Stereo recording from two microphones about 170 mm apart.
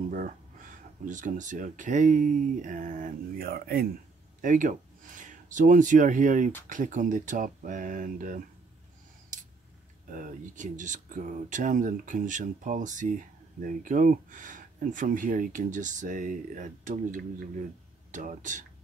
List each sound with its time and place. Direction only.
0.1 s speech: 50° right (ahead or behind)
4.4 s speech: 50° right (ahead or behind)
10.1 s speech: 50° right (ahead or behind)